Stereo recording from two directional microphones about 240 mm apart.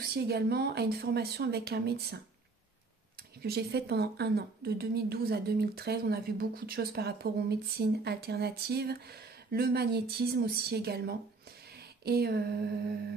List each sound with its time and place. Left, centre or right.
0.0 s a woman's voice: right
3.4 s a woman's voice: right
12.0 s a sound: right